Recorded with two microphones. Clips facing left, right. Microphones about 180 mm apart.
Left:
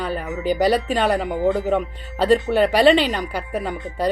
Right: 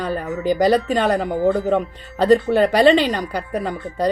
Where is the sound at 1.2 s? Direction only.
15° left (ahead or behind).